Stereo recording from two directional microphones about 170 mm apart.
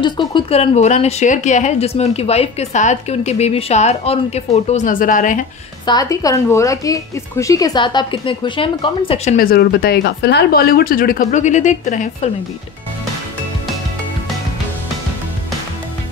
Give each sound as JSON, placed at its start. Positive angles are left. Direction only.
{"t": 0.0, "sound": "speech", "side_deg": 25}
{"t": 0.6, "sound": "a woman's voice", "side_deg": 40}
{"t": 5.9, "sound": "speech", "side_deg": 20}
{"t": 9.4, "sound": "speech", "side_deg": 65}